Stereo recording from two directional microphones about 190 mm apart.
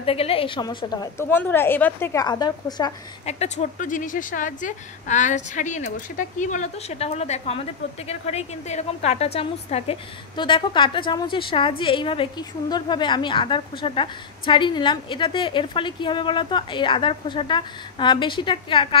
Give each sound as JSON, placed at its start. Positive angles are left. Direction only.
{"t": 0.0, "sound": "a woman's voice", "side_deg": 30}
{"t": 3.3, "sound": "a woman's voice", "side_deg": 35}